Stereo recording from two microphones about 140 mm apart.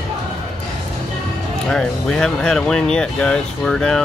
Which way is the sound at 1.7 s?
5° left (ahead or behind).